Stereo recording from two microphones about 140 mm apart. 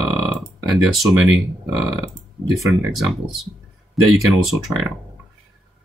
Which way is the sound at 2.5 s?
Centre (ahead or behind).